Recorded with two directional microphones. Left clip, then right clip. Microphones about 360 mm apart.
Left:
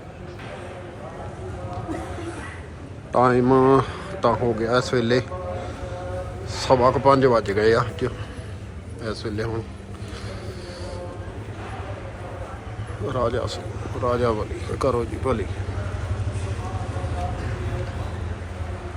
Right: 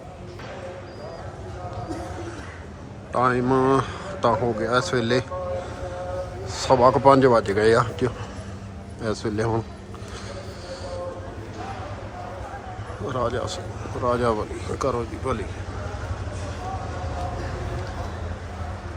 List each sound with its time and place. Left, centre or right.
3.1 s a man's voice: centre
6.5 s a man's voice: centre
13.1 s a man's voice: centre